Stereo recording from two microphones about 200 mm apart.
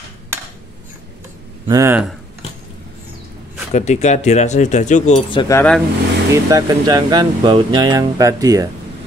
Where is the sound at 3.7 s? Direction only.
35° left (ahead or behind).